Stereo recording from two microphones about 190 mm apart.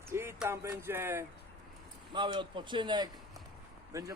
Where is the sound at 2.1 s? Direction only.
25° right (ahead or behind).